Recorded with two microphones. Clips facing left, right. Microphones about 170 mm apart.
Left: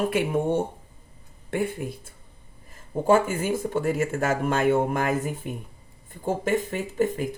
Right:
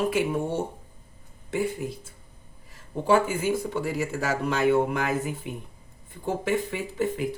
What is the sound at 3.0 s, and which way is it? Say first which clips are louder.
Speech: left 1 dB; 45° left (ahead or behind).